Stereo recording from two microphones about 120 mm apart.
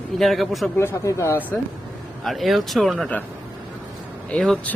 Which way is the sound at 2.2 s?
Centre (ahead or behind).